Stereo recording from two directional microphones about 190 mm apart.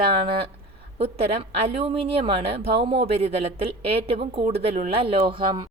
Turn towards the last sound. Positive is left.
turn(degrees=-25)  # may be behind; listen again after turning